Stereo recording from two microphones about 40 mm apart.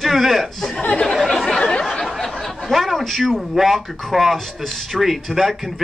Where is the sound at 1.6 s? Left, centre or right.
Left.